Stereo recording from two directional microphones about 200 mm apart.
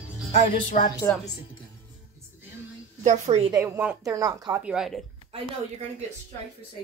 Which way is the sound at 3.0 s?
35° right (ahead or behind).